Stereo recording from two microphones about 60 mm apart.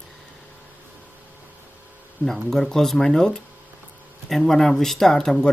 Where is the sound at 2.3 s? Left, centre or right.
Centre.